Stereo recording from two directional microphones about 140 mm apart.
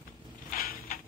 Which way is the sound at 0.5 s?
90° left.